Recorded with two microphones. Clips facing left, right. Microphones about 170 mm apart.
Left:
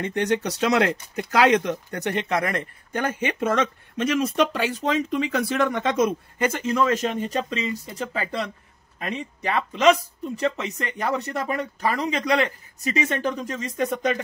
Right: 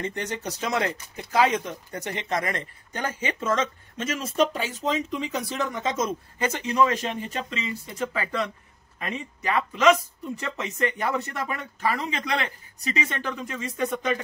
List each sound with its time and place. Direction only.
0.0 s speech: 65° left (ahead or behind); by 14.1 s 40° left (ahead or behind)